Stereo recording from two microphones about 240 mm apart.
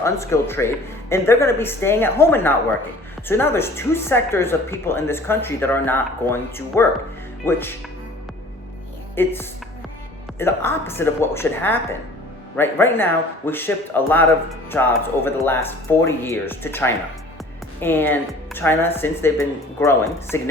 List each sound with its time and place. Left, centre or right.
0.0 s a woman's voice: centre
9.1 s a woman's voice: centre